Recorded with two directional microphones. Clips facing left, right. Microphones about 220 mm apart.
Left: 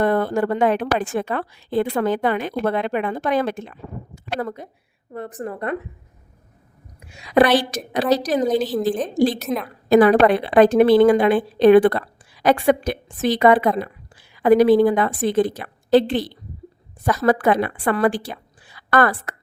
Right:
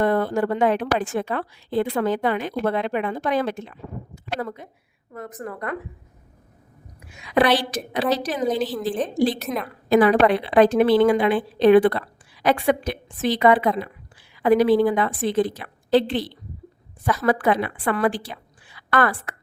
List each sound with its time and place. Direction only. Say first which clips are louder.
0.0 s a woman's voice: left 1 dB; 55° left (ahead or behind); by 5.7 s 25° left (ahead or behind)
7.2 s a woman's voice: left 3 dB; 40° left (ahead or behind)
9.4 s a woman's voice: left 3 dB; centre (ahead or behind)
9.9 s a woman's voice: left 3 dB; 45° left (ahead or behind)